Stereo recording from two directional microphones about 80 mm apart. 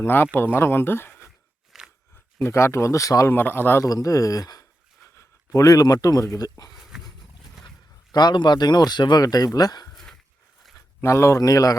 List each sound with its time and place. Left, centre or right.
0.0 s speech: left
1.7 s a sound: centre
2.4 s speech: left
3.3 s speech: left
3.8 s speech: left
5.0 s speech: left
6.7 s roaring cats: centre
8.1 s speech: left
9.2 s speech: left
9.9 s a sound: centre
11.0 s speech: left